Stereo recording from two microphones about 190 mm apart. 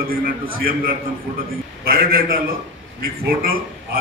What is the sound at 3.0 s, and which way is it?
Speech, 55° right (ahead or behind).